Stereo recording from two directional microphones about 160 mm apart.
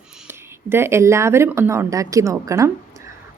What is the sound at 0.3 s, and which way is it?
A woman's voice, 15° right (ahead or behind).